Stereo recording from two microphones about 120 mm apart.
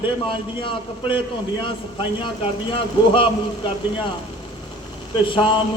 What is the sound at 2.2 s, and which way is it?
A man's voice, 45° left (ahead or behind).